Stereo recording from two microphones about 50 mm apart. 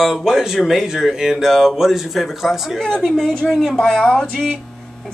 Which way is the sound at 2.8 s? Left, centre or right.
Centre.